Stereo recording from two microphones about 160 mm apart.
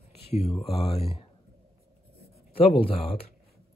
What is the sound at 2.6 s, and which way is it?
Speech, 35° left (ahead or behind).